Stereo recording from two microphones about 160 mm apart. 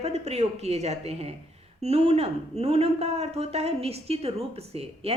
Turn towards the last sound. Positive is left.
turn(degrees=-40)  # may be behind; listen again after turning